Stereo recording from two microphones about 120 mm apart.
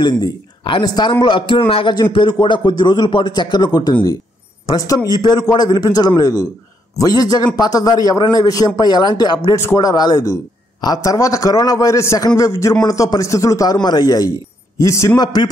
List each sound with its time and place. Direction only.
0.0 s a man's voice: 40° left (ahead or behind); by 15.2 s 25° left (ahead or behind)